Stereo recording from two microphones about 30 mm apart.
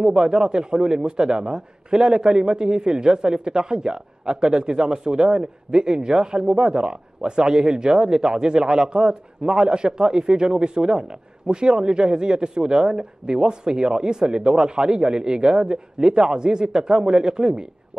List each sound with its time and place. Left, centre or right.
0.0 s speech: right